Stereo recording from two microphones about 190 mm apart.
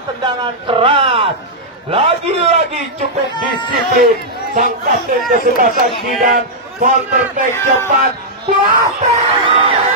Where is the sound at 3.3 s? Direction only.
25° left (ahead or behind).